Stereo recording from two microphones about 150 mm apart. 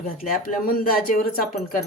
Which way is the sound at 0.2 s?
70° left (ahead or behind).